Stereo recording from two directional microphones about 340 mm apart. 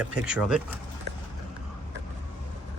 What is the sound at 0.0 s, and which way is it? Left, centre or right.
Speech, centre.